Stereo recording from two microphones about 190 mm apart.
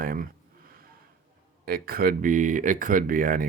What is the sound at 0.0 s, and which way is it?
Speech, 50° right (ahead or behind).